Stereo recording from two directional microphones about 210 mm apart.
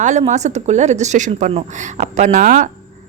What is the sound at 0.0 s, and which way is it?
Speech, 35° right (ahead or behind).